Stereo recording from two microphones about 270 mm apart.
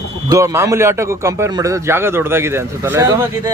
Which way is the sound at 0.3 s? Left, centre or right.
Centre.